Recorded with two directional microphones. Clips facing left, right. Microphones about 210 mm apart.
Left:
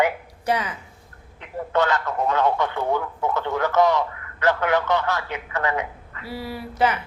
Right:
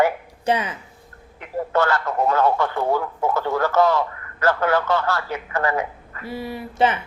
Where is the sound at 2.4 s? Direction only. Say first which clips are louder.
Right 2 dB; 20° left (ahead or behind).